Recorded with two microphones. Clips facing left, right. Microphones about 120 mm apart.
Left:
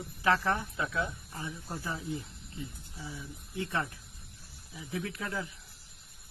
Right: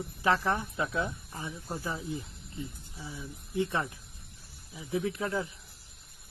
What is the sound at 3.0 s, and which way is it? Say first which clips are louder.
Speech: right 1 dB; centre (ahead or behind).